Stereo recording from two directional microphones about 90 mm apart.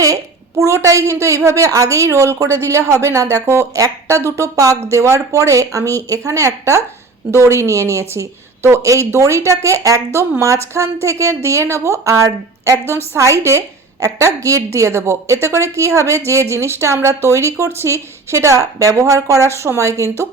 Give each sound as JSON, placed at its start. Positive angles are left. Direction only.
{"t": 0.6, "sound": "a woman's voice", "side_deg": -35}